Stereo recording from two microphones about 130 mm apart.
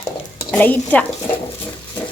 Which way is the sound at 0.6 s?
15° left (ahead or behind).